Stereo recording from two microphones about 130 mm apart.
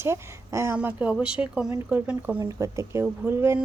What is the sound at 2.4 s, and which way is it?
A woman's voice, 25° right (ahead or behind).